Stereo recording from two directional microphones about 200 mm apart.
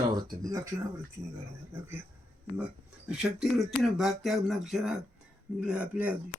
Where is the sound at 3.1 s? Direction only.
Centre (ahead or behind).